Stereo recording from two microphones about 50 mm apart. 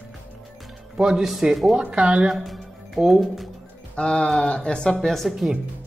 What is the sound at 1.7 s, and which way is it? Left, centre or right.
Speech, centre.